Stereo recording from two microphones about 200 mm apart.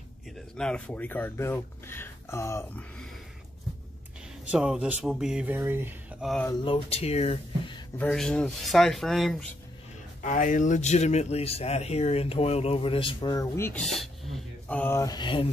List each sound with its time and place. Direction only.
0.6 s speech: 5° left (ahead or behind)
4.5 s speech: 5° right (ahead or behind)
6.6 s speech: 30° left (ahead or behind)
8.0 s speech: 5° left (ahead or behind)
10.2 s speech: 40° left (ahead or behind); by 15.4 s 25° left (ahead or behind)